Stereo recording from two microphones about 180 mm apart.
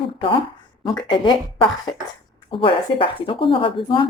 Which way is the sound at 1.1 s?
25° left (ahead or behind).